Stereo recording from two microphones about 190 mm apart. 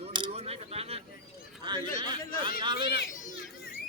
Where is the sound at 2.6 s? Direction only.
25° right (ahead or behind).